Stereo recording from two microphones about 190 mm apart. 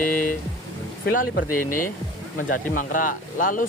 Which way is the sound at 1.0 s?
50° left (ahead or behind).